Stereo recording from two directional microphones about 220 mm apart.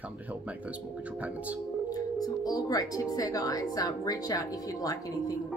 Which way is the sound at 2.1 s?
15° left (ahead or behind).